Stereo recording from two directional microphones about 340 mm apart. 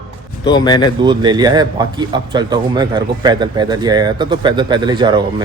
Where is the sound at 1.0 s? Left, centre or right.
Centre.